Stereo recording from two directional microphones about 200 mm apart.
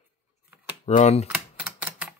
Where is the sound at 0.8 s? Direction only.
35° left (ahead or behind).